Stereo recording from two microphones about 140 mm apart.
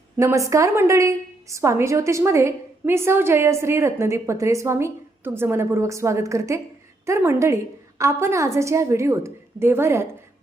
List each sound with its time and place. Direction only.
0.2 s a woman's voice: 20° right (ahead or behind)